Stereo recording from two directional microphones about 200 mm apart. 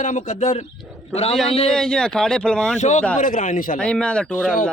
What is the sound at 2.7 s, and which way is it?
A man's voice, 35° left (ahead or behind).